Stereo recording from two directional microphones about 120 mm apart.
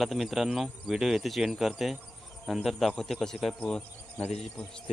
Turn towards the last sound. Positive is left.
turn(degrees=5)  # may be behind; listen again after turning